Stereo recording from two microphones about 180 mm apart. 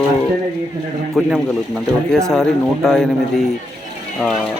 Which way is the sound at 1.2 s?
Centre (ahead or behind).